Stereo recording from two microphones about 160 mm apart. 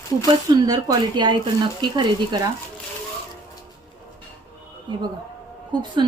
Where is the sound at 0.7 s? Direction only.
25° right (ahead or behind).